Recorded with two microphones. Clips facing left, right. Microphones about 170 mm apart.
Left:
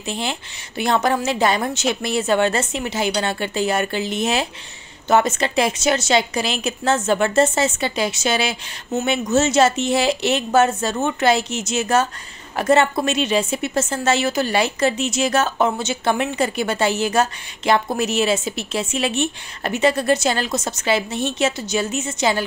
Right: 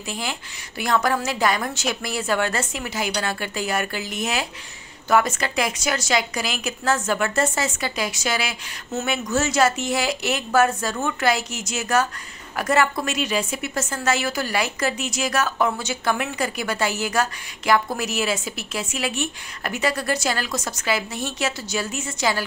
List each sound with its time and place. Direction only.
0.0 s a woman's voice: 25° left (ahead or behind)